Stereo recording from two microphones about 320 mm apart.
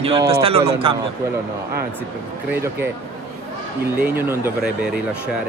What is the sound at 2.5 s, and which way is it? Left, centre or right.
Speech, centre.